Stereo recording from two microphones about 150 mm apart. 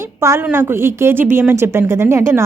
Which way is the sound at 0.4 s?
15° right (ahead or behind).